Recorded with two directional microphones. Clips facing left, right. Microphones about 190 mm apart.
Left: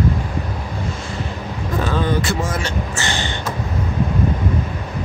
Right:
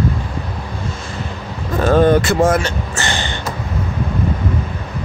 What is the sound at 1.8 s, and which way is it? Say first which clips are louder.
Speech: right 9 dB; 50° right (ahead or behind).